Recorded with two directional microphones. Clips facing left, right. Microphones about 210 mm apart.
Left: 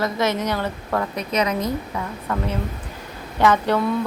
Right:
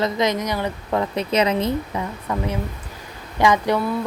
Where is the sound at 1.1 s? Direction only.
30° right (ahead or behind).